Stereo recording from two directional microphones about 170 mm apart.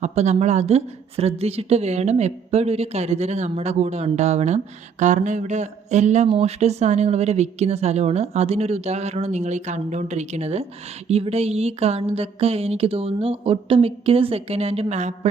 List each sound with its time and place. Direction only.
0.0 s a woman's voice: 40° right (ahead or behind)